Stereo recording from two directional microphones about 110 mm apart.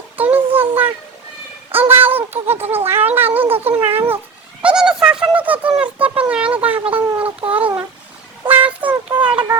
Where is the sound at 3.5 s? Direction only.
65° right (ahead or behind).